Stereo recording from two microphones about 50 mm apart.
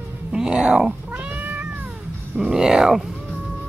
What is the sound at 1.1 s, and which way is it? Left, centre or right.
Cat, right.